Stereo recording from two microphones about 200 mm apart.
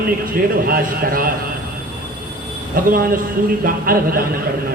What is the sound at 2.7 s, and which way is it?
Speech, 45° right (ahead or behind).